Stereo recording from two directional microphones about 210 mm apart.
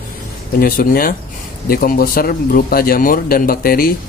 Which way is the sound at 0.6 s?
45° left (ahead or behind).